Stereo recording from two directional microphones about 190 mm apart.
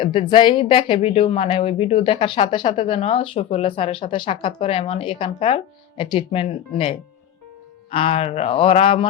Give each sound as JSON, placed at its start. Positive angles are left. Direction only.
{"t": 0.0, "sound": "speech", "side_deg": 25}